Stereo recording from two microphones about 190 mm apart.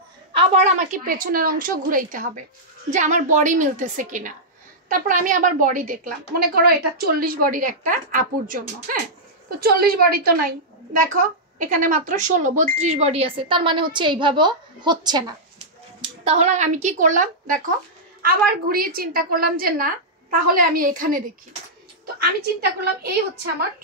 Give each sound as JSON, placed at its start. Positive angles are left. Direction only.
{"t": 0.3, "sound": "a woman's voice", "side_deg": -30}
{"t": 0.7, "sound": "a woman's voice", "side_deg": -45}
{"t": 16.0, "sound": "a woman's voice", "side_deg": -35}
{"t": 22.8, "sound": "a woman's voice", "side_deg": -55}